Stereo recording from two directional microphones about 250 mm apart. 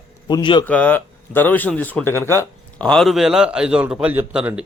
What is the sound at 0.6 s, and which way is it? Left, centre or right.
A man's voice, centre.